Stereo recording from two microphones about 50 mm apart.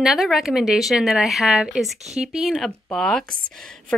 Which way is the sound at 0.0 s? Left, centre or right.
Centre.